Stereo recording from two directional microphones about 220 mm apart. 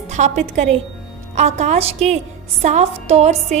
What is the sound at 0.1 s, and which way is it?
A woman's voice, 30° right (ahead or behind).